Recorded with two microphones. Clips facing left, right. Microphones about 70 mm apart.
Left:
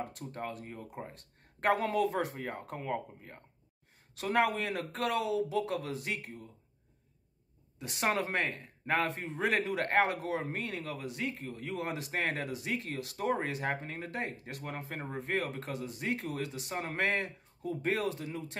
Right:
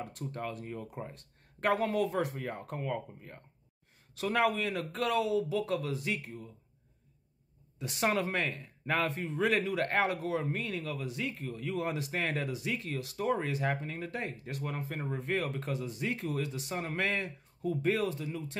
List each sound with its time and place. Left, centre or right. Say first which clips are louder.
0.0 s a man's voice: right 1 dB; left
1.1 s a man's voice: even; left
4.2 s a man's voice: even; left
7.8 s a man's voice: right 1 dB; left
13.7 s a man's voice: right 1 dB; left
15.7 s a man's voice: right 1 dB; left
16.7 s a man's voice: left 1 dB; left
18.0 s a man's voice: right 1 dB; left